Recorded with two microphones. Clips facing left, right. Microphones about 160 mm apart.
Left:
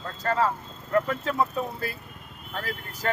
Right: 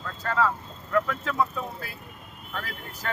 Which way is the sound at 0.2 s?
40° left (ahead or behind).